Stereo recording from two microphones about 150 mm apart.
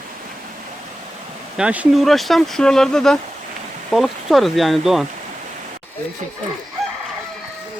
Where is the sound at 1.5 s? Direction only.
10° right (ahead or behind).